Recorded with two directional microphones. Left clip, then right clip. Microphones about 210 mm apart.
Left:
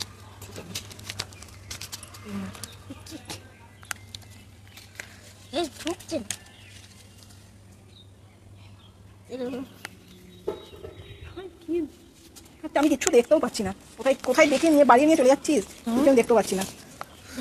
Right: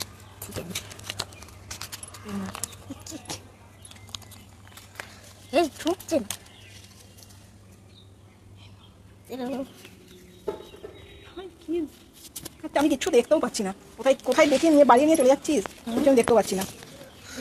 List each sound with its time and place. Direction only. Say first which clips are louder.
0.7 s a sound: left 1 dB; 10° left (ahead or behind)
3.0 s keys jangling: right 2 dB; 10° right (ahead or behind)
5.5 s speech: right 6 dB; 45° right (ahead or behind)
9.3 s speech: even; 40° right (ahead or behind)
11.2 s a sound: even; centre (ahead or behind)
12.6 s speech: left 1 dB; 5° left (ahead or behind)